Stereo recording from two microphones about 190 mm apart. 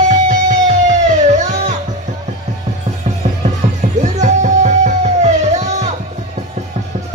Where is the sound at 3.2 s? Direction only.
35° right (ahead or behind).